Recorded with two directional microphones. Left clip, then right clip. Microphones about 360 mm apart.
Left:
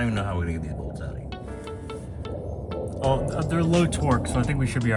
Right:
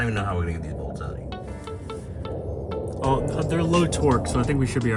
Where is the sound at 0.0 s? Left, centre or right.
Centre.